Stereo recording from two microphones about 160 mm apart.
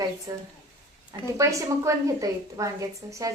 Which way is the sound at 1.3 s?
20° right (ahead or behind).